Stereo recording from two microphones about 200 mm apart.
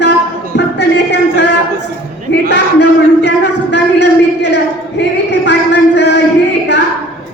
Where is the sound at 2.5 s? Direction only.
60° left (ahead or behind).